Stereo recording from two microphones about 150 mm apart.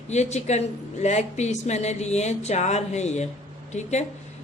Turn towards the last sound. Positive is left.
turn(degrees=50)  # may be behind; listen again after turning